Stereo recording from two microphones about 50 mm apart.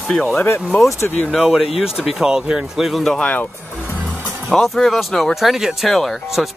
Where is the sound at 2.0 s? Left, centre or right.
Centre.